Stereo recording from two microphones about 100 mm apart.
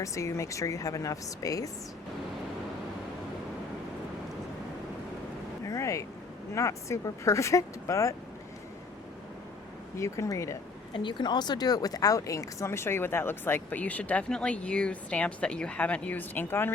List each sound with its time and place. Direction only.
0.0 s speech: 30° left (ahead or behind)
5.6 s a sound: 30° left (ahead or behind)
6.5 s speech: 30° left (ahead or behind)
10.0 s speech: 30° left (ahead or behind)
10.9 s speech: 50° left (ahead or behind); by 16.7 s 20° left (ahead or behind)